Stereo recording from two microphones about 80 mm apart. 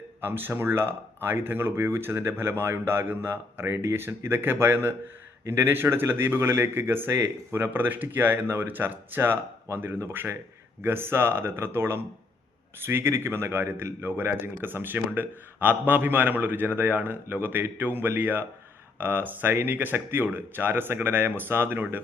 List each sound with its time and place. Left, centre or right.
0.2 s speech: right